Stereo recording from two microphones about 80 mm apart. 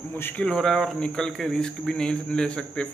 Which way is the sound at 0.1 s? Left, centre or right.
Left.